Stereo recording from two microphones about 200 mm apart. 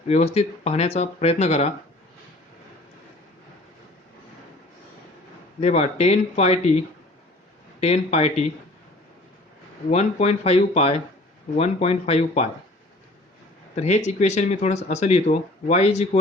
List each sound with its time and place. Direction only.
0.1 s speech: 35° left (ahead or behind)
5.5 s speech: 35° left (ahead or behind)
9.9 s speech: 35° left (ahead or behind)
13.7 s speech: 35° left (ahead or behind)